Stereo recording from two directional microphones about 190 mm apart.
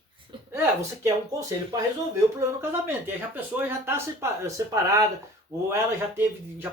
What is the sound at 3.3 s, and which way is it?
Speech, 10° right (ahead or behind).